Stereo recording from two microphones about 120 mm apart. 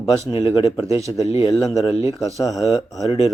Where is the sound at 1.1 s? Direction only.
25° left (ahead or behind).